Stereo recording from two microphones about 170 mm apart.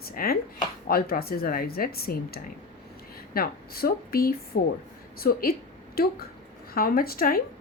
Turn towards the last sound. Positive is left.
turn(degrees=60)  # may be behind; listen again after turning